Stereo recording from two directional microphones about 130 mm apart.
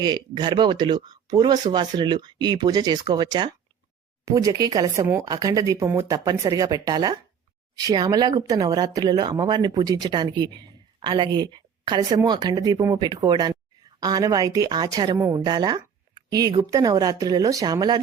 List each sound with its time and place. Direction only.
0.0 s speech: 35° right (ahead or behind)